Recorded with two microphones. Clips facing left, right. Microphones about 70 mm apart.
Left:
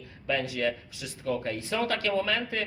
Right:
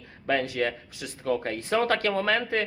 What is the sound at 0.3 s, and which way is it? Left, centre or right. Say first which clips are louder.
Speech: right 2 dB; right.